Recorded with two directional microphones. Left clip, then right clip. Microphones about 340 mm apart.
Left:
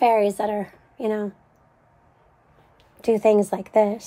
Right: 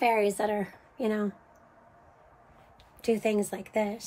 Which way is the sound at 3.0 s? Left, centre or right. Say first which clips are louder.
Left 10 dB; centre.